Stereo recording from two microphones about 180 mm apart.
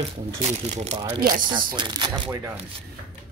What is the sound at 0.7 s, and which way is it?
Speech, 40° right (ahead or behind).